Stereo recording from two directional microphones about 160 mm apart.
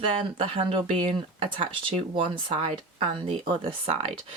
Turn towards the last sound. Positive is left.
turn(degrees=-35)  # may be behind; listen again after turning